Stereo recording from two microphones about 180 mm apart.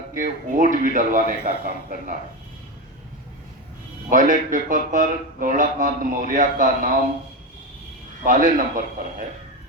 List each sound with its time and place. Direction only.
0.2 s speech: 45° right (ahead or behind)
4.1 s speech: 45° right (ahead or behind)
8.2 s speech: 50° right (ahead or behind)